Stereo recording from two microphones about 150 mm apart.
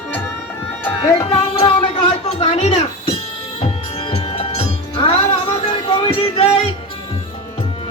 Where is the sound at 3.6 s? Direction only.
40° left (ahead or behind).